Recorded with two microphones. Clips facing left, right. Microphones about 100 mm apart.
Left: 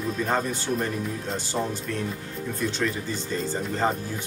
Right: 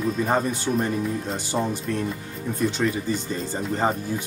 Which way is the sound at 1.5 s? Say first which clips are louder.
Right 4 dB; 15° right (ahead or behind).